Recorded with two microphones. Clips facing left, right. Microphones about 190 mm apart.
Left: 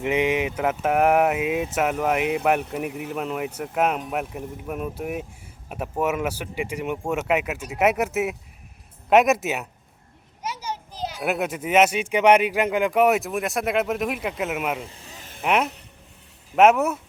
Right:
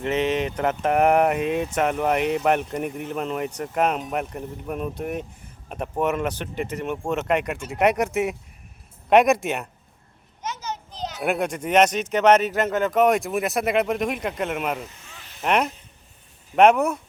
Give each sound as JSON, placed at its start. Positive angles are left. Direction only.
{"t": 0.0, "sound": "speech", "side_deg": 10}
{"t": 15.0, "sound": "a sound", "side_deg": 40}
{"t": 15.4, "sound": "speech", "side_deg": 0}